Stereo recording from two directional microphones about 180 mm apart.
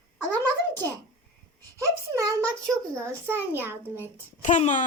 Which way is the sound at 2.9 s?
15° right (ahead or behind).